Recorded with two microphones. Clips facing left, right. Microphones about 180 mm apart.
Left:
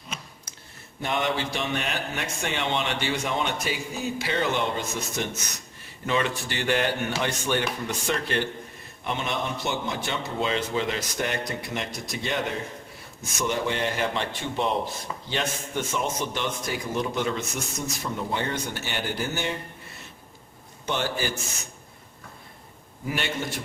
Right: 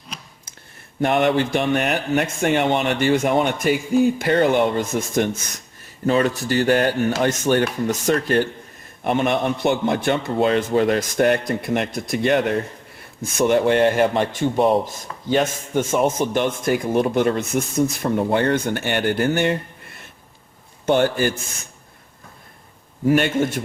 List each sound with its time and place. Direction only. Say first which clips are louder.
1.0 s speech: right 9 dB; 60° right (ahead or behind)
6.1 s speech: right 8 dB; 40° right (ahead or behind)
9.0 s a man's voice: right 10 dB; 55° right (ahead or behind)
20.8 s speech: right 10 dB; 55° right (ahead or behind)
23.0 s speech: right 12 dB; 50° right (ahead or behind)